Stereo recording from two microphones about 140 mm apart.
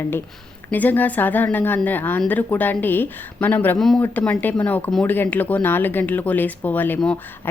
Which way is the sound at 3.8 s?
5° left (ahead or behind).